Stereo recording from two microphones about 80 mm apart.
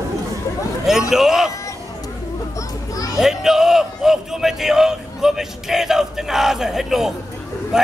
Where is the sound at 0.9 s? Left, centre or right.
Centre.